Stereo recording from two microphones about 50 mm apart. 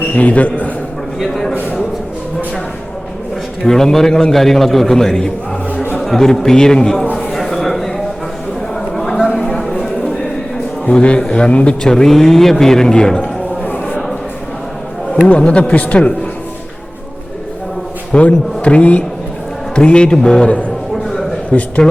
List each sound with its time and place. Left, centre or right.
0.2 s a man's voice: left
1.2 s a sound: centre
3.6 s a man's voice: centre
7.3 s a sound: centre
9.5 s a sound: centre
10.8 s a man's voice: left
15.4 s a man's voice: left
18.1 s a man's voice: left
21.5 s a man's voice: left